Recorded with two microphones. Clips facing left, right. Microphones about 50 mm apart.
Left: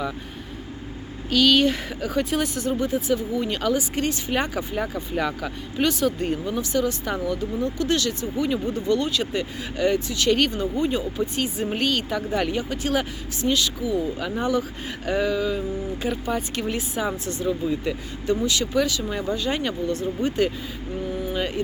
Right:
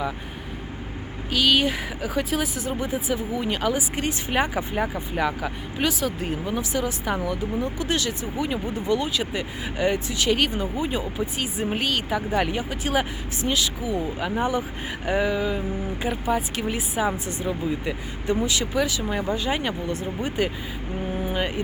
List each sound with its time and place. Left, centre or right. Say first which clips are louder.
1.3 s speech: left 3 dB; centre
21.1 s vehicle: right 1 dB; right
21.3 s speech: even; right